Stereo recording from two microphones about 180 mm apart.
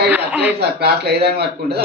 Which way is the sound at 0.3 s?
10° right (ahead or behind).